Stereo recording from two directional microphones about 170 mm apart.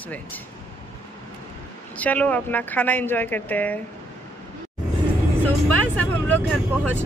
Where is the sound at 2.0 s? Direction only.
10° left (ahead or behind).